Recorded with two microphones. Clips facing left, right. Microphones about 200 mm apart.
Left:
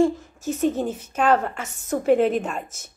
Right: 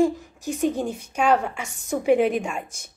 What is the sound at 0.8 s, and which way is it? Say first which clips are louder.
A woman's voice: left 1 dB; 5° left (ahead or behind).